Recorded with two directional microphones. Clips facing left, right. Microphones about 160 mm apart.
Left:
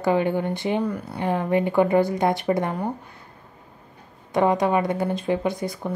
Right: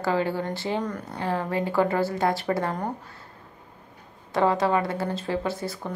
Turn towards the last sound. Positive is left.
turn(degrees=15)  # may be behind; listen again after turning